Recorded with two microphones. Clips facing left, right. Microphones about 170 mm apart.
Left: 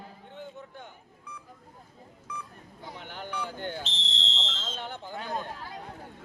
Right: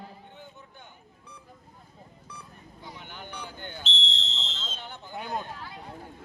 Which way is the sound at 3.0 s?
90° left.